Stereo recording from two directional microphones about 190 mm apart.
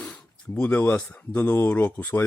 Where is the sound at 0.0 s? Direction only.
5° left (ahead or behind).